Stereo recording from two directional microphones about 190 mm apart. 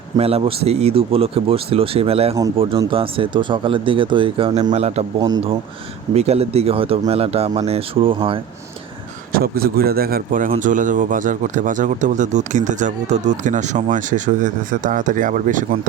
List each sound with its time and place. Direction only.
0.2 s speech: 30° right (ahead or behind)
5.2 s speech: 20° right (ahead or behind)
6.1 s speech: 35° right (ahead or behind)
9.3 s a man's voice: 50° right (ahead or behind)